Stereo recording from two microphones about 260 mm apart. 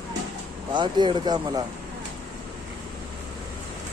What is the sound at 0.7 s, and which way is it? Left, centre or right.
Speech, centre.